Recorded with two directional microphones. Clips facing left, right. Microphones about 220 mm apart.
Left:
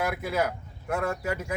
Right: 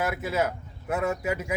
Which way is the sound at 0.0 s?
5° right (ahead or behind).